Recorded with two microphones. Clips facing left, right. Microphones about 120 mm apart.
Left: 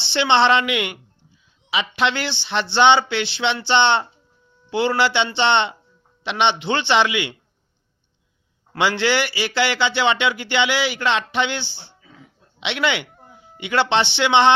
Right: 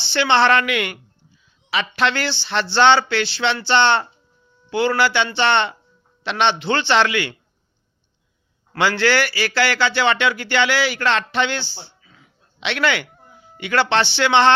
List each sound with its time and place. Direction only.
0.0 s a man's voice: 20° left (ahead or behind)
8.7 s speech: 20° left (ahead or behind)